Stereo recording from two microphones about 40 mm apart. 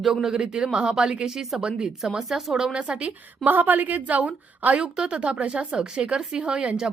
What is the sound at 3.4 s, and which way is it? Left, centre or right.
A woman's voice, right.